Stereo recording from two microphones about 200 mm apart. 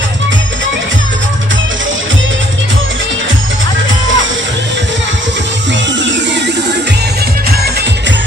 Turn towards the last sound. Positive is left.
turn(degrees=-65)  # may be behind; listen again after turning